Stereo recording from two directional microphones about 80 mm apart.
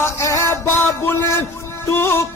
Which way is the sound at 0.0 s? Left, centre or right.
Left.